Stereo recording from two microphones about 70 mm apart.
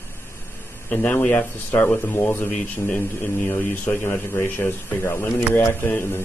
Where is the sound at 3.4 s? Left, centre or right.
Left.